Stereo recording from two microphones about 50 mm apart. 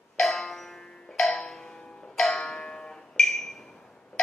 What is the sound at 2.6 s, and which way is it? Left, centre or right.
Music, centre.